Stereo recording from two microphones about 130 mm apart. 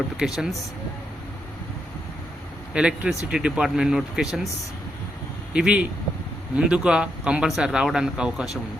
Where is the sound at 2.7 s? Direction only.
10° right (ahead or behind).